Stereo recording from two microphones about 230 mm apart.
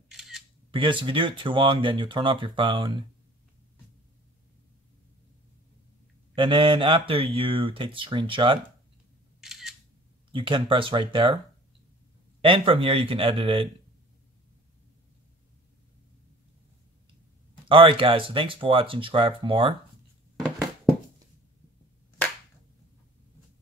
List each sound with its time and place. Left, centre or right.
0.1 s camera: centre
0.7 s speech: right
6.3 s speech: right
9.4 s camera: centre
10.3 s speech: right
12.4 s speech: right
17.6 s speech: right